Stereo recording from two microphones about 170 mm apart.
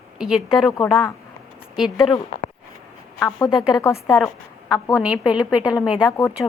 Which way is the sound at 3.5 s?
Centre (ahead or behind).